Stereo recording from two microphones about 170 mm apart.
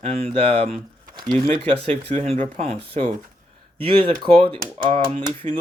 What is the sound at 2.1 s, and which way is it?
Speech, 35° right (ahead or behind).